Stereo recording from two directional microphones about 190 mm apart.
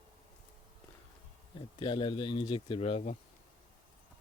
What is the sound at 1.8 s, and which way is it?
Speech, 25° left (ahead or behind).